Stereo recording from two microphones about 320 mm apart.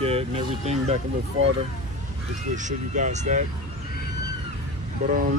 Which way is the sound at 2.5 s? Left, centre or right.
Right.